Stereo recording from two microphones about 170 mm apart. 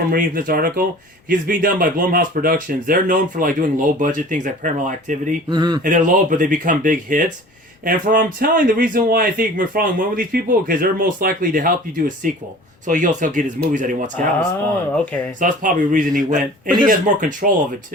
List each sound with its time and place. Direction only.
0.1 s speech: 60° right (ahead or behind)
5.5 s speech: 25° right (ahead or behind)
5.8 s speech: 50° right (ahead or behind)
15.4 s speech: 50° right (ahead or behind)